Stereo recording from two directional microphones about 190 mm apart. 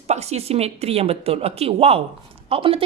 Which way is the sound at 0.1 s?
35° right (ahead or behind).